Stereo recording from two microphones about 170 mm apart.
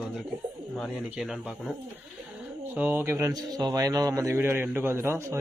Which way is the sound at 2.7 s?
10° right (ahead or behind).